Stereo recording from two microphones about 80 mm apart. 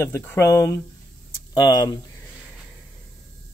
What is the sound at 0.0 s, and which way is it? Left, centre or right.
Speech, left.